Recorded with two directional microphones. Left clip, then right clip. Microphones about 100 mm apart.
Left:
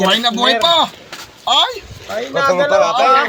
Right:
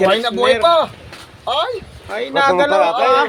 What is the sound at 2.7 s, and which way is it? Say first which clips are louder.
Speech: left 2 dB; 50° right (ahead or behind).